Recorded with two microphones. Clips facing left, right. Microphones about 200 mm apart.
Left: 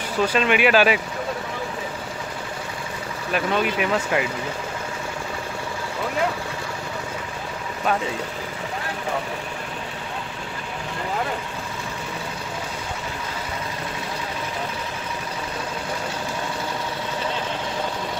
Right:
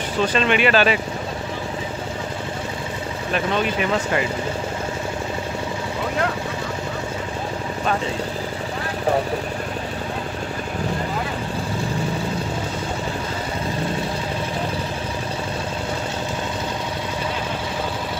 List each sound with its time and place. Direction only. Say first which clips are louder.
0.2 s speech: even; 5° left (ahead or behind)
3.3 s speech: even; 5° left (ahead or behind)